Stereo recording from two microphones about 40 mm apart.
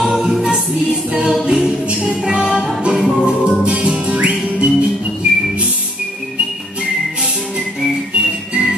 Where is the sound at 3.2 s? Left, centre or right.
Right.